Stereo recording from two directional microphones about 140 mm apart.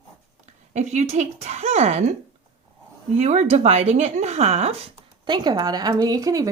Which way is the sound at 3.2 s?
50° right (ahead or behind).